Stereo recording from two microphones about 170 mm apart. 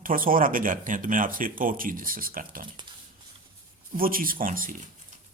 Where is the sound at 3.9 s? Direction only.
55° right (ahead or behind).